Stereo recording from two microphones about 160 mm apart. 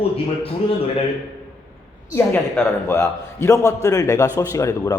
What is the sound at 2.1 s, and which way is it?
A man's voice, 15° left (ahead or behind).